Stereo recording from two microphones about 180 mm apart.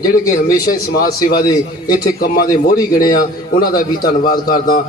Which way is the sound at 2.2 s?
55° left (ahead or behind).